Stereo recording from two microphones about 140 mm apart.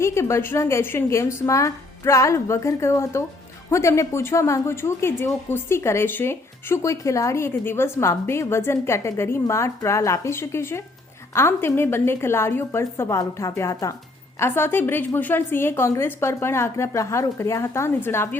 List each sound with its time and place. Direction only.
0.0 s a woman's voice: 20° left (ahead or behind)